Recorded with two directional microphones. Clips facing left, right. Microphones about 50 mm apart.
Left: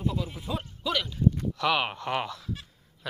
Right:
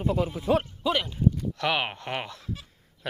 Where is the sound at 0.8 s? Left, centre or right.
Right.